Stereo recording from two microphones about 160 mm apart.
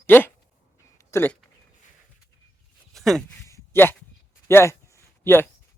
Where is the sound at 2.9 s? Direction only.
Centre (ahead or behind).